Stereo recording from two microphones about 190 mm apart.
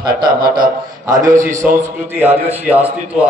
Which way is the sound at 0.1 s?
50° right (ahead or behind).